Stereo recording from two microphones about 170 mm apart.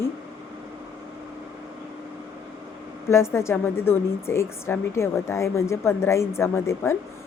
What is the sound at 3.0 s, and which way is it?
A woman's voice, 15° left (ahead or behind).